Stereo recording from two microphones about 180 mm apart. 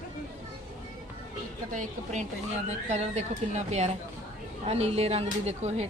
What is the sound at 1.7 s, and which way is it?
A woman's voice, 45° right (ahead or behind).